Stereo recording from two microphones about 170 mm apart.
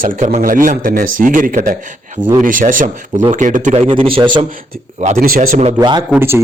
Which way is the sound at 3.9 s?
30° right (ahead or behind).